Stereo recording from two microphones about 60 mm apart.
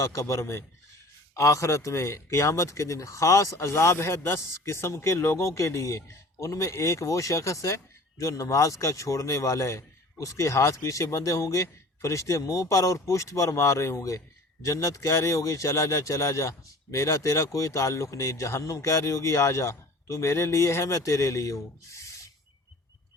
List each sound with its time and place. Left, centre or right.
0.0 s a man's voice: left